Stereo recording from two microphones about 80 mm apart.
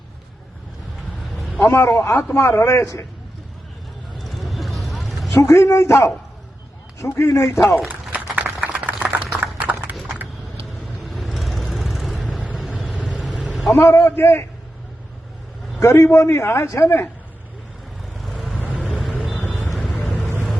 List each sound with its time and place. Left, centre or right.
1.6 s a man's voice: left
4.2 s vehicle: centre
5.3 s a man's voice: left
8.4 s a sound: centre
11.0 s vehicle: centre
12.9 s vehicle: centre
13.4 s vehicle: centre
13.7 s a man's voice: left
15.8 s a man's voice: left
18.2 s vehicle: centre
20.0 s vehicle: centre